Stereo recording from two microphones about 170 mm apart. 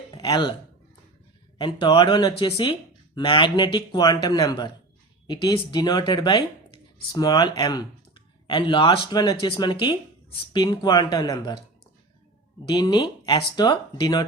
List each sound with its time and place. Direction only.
0.1 s a sound: 25° left (ahead or behind)
1.5 s speech: 30° left (ahead or behind)
12.6 s speech: 25° left (ahead or behind)